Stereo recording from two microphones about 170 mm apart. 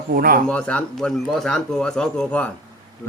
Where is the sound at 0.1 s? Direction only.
60° right (ahead or behind).